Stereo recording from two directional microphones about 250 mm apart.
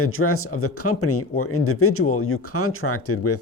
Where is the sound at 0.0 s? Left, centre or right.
Left.